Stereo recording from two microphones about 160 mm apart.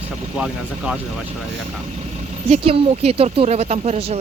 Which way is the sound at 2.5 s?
35° right (ahead or behind).